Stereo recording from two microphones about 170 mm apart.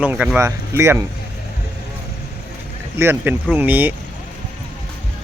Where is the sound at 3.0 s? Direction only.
15° right (ahead or behind).